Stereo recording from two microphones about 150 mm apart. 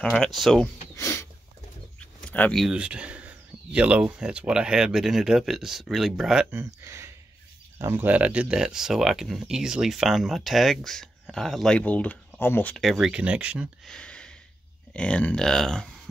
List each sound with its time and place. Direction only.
0.0 s speech: centre (ahead or behind)
0.9 s a sound: 15° left (ahead or behind)
2.6 s speech: 5° right (ahead or behind)
6.5 s speech: 15° right (ahead or behind); by 12.7 s 15° left (ahead or behind)
12.7 s speech: centre (ahead or behind)
13.8 s a sound: 5° left (ahead or behind)
15.0 s speech: 10° left (ahead or behind)